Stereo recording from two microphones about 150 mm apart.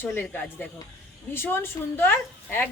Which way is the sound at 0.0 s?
15° left (ahead or behind).